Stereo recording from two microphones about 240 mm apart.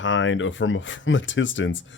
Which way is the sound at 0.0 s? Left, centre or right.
Left.